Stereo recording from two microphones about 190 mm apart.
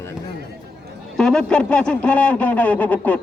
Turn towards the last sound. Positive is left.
turn(degrees=10)  # may be behind; listen again after turning